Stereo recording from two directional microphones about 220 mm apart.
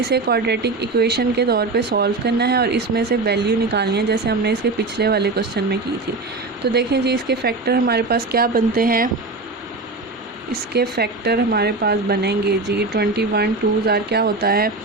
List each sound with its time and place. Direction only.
0.0 s speech: 45° right (ahead or behind)
6.7 s speech: 50° right (ahead or behind)
10.5 s speech: 45° right (ahead or behind)